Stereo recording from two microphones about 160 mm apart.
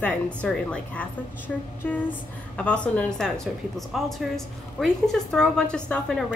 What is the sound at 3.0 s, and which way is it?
A woman's voice, 5° left (ahead or behind).